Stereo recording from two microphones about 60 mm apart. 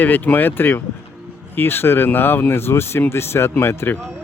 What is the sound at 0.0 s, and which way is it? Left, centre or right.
Speech, left.